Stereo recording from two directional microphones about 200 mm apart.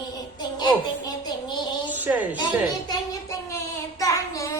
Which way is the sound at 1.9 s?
10° right (ahead or behind).